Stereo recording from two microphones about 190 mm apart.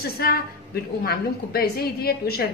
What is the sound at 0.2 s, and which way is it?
A woman's voice, 55° left (ahead or behind).